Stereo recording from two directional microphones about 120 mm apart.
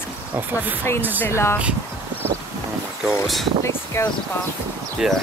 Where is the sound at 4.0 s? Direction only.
20° left (ahead or behind).